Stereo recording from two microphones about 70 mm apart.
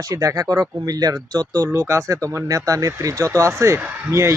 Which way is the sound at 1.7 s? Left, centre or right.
Right.